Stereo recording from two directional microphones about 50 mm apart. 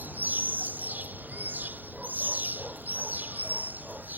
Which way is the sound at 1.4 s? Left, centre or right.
Right.